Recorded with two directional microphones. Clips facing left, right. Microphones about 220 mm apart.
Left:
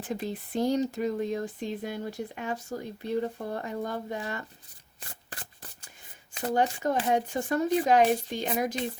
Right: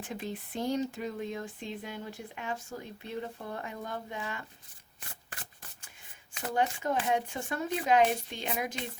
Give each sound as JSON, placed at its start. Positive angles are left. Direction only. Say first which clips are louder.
{"t": 0.1, "sound": "speech", "louder": "left 7 dB", "side_deg": 35}
{"t": 6.3, "sound": "speech", "louder": "left 4 dB", "side_deg": 35}